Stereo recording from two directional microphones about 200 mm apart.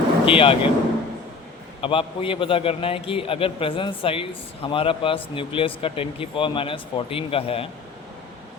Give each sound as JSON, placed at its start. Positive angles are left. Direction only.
{"t": 0.3, "sound": "a man's voice", "side_deg": 25}
{"t": 1.8, "sound": "a man's voice", "side_deg": 25}